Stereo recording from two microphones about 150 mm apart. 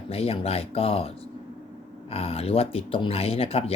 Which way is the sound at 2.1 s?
40° left (ahead or behind).